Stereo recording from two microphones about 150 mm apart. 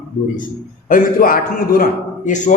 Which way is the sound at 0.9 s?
70° left (ahead or behind).